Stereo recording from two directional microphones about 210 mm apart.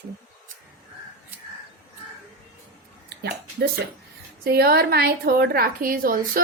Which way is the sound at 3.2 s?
50° right (ahead or behind).